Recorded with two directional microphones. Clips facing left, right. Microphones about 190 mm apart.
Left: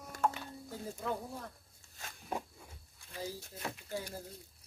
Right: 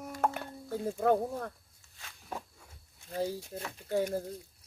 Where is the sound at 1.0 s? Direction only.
60° right (ahead or behind).